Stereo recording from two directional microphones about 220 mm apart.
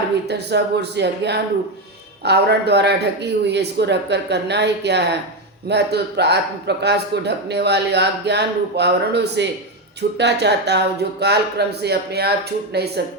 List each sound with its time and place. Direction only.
0.3 s a man's voice: 50° right (ahead or behind)